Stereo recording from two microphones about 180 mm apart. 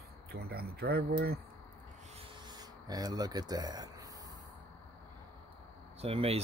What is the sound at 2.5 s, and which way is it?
Speech, 20° right (ahead or behind).